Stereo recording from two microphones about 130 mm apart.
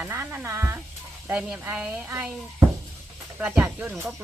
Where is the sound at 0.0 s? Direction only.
15° right (ahead or behind).